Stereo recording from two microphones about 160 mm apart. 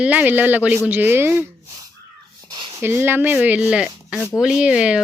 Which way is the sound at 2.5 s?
30° right (ahead or behind).